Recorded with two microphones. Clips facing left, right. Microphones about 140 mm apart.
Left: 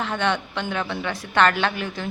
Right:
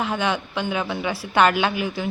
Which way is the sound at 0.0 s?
5° right (ahead or behind).